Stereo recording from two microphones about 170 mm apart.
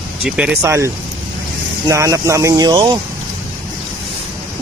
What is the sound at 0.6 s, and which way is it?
Speech, 15° right (ahead or behind).